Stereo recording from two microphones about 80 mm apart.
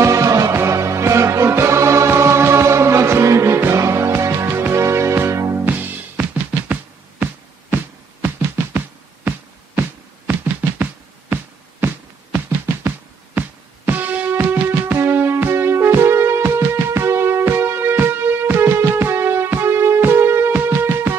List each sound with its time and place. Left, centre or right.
0.0 s music: right
5.7 s music: right
9.8 s music: right
12.8 s music: right